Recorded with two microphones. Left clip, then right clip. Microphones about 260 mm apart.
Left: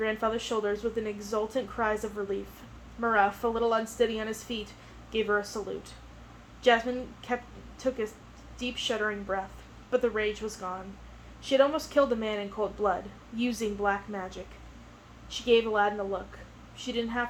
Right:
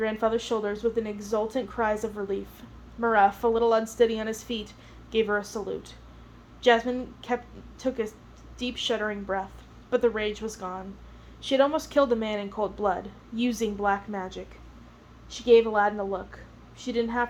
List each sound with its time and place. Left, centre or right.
0.0 s a woman's voice: right